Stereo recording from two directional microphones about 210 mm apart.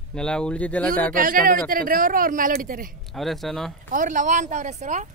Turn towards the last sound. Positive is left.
turn(degrees=-35)  # may be behind; listen again after turning